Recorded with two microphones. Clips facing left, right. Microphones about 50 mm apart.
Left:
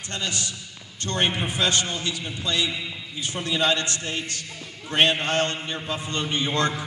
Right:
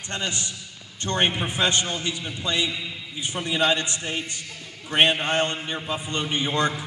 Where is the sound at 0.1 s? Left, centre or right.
Right.